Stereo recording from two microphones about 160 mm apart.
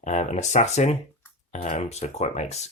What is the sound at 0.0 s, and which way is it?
Speech, 50° left (ahead or behind).